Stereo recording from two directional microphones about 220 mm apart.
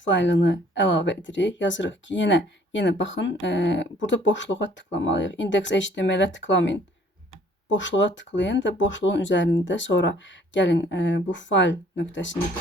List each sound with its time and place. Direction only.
0.0 s speech: 55° left (ahead or behind)